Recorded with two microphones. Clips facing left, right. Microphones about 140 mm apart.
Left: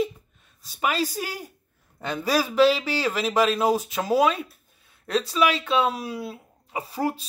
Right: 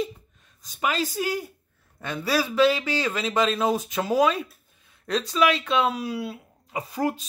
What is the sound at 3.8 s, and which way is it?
Speech, 35° left (ahead or behind).